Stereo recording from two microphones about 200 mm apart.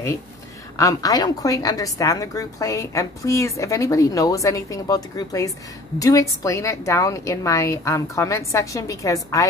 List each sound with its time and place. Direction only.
0.7 s a woman's voice: 15° left (ahead or behind)